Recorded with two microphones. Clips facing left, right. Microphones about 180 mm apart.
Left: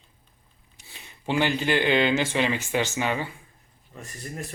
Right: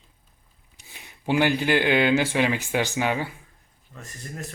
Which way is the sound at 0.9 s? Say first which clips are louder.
Right 3 dB; 10° right (ahead or behind).